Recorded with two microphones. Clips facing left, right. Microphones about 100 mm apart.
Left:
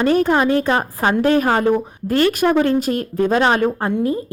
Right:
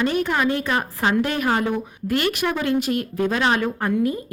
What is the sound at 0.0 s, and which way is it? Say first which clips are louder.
A woman's voice: left 6 dB; 40° left (ahead or behind).